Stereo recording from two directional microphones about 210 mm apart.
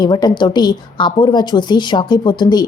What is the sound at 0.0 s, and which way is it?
A woman's voice, 20° left (ahead or behind).